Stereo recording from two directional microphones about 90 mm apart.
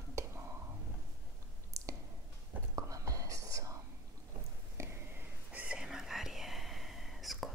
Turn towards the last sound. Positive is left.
turn(degrees=0)  # may be behind; listen again after turning